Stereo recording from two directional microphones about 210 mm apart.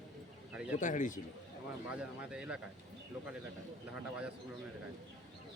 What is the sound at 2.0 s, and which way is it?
Speech, 5° right (ahead or behind).